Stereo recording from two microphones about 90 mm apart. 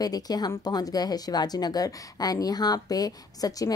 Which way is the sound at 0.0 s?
45° left (ahead or behind).